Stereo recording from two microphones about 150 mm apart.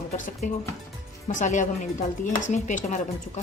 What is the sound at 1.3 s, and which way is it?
Speech, 55° left (ahead or behind).